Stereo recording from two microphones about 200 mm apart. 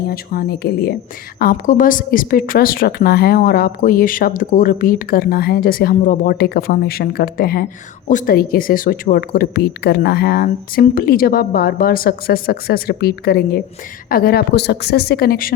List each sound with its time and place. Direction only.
0.1 s a woman's voice: 50° left (ahead or behind)